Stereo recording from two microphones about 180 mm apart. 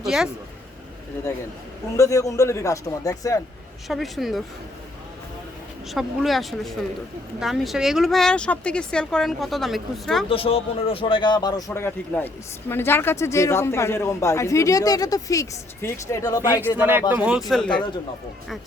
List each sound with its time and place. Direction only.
0.0 s speech: 5° right (ahead or behind)
2.0 s a man's voice: 15° left (ahead or behind)
3.8 s speech: centre (ahead or behind)
5.9 s speech: centre (ahead or behind)
10.2 s a man's voice: 30° left (ahead or behind)
16.7 s speech: 10° right (ahead or behind)